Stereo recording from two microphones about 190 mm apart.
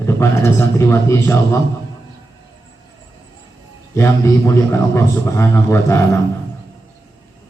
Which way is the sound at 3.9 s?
15° left (ahead or behind).